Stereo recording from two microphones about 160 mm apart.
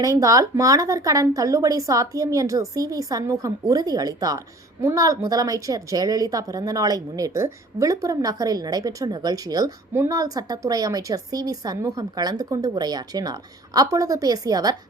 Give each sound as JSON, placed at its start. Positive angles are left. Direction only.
{"t": 0.0, "sound": "speech", "side_deg": -20}